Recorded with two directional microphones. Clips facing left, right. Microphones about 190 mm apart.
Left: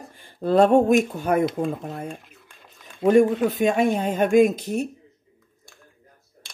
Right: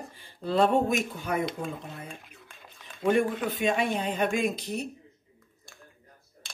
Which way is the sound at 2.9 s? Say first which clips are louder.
Left 8 dB; 45° left (ahead or behind).